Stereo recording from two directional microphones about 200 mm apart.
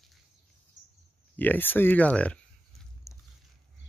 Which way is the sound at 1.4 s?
10° left (ahead or behind).